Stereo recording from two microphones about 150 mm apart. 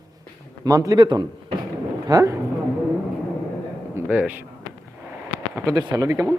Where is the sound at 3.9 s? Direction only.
10° right (ahead or behind).